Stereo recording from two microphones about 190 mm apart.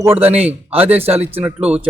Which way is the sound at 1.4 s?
5° right (ahead or behind).